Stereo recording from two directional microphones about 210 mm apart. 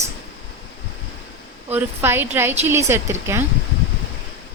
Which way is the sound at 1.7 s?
10° right (ahead or behind).